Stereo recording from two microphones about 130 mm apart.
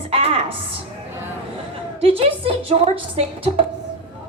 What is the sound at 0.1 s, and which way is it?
Music, 50° right (ahead or behind).